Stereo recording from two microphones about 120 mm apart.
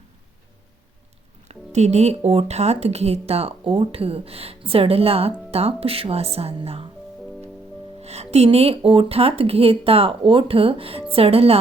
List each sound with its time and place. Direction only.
1.5 s speech: 70° right (ahead or behind)
8.0 s speech: 60° right (ahead or behind)